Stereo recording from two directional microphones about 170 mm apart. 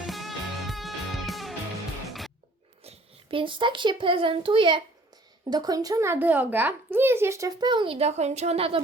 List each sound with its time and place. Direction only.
0.1 s music: centre (ahead or behind)
2.8 s a child's voice: 35° right (ahead or behind)